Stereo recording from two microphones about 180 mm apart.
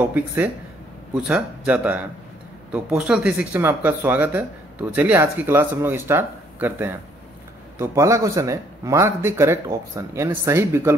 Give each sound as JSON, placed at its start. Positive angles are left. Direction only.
{"t": 1.1, "sound": "speech", "side_deg": -5}